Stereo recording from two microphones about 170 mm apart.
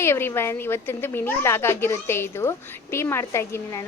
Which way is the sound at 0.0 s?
15° left (ahead or behind).